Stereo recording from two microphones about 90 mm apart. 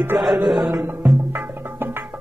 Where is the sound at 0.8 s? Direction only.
25° right (ahead or behind).